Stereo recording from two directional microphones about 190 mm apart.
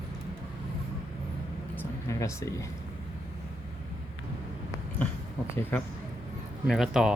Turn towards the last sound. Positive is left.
turn(degrees=-5)  # may be behind; listen again after turning